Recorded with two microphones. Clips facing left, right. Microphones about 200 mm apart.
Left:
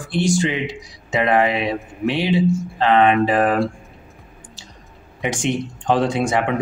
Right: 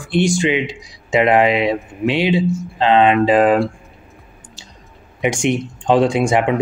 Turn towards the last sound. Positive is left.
turn(degrees=-15)  # may be behind; listen again after turning